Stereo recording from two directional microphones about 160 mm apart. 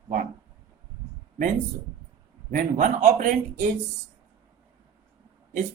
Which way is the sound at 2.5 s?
55° right (ahead or behind).